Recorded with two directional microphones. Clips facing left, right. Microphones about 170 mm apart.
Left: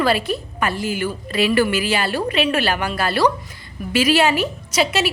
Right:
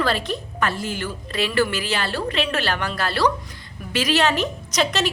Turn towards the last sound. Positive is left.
turn(degrees=5)  # may be behind; listen again after turning